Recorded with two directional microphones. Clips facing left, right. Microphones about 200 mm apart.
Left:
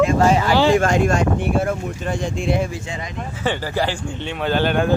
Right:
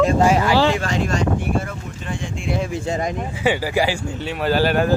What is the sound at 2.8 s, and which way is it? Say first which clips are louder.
Speech: right 8 dB; 45° right (ahead or behind).